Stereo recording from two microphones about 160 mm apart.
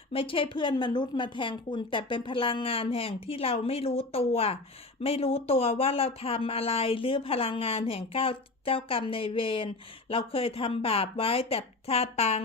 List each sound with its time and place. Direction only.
0.1 s speech: 35° left (ahead or behind)